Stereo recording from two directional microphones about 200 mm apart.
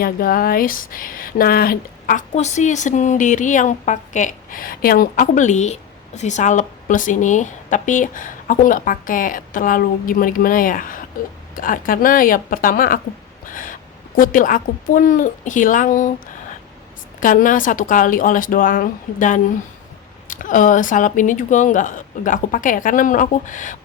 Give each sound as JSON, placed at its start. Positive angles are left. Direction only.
{"t": 0.0, "sound": "speech", "side_deg": 45}
{"t": 13.5, "sound": "a sound", "side_deg": 40}
{"t": 14.2, "sound": "speech", "side_deg": 45}
{"t": 17.2, "sound": "speech", "side_deg": 40}